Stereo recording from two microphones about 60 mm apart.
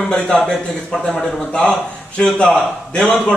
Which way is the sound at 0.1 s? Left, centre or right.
Centre.